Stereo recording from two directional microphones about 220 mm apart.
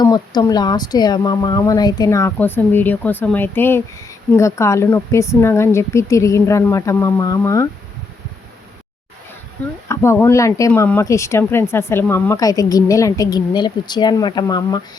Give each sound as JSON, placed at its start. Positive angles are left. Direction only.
{"t": 0.0, "sound": "speech", "side_deg": 15}
{"t": 9.9, "sound": "speech", "side_deg": 10}